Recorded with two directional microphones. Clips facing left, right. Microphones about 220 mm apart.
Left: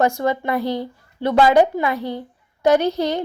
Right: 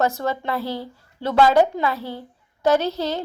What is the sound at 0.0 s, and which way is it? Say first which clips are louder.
A woman's voice: left 4 dB; 15° left (ahead or behind).